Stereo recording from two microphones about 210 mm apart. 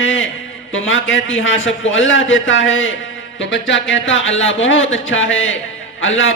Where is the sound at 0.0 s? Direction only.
65° left (ahead or behind).